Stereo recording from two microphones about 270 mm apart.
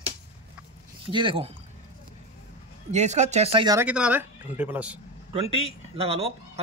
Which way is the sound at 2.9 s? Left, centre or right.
Right.